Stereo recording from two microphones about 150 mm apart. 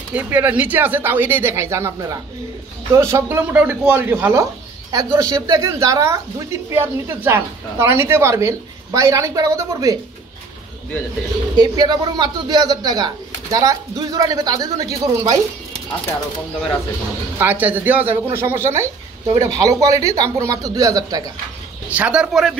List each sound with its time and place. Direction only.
0.1 s speech: 10° right (ahead or behind)
11.5 s speech: 25° right (ahead or behind)
17.4 s speech: 10° right (ahead or behind)
21.9 s speech: 10° right (ahead or behind)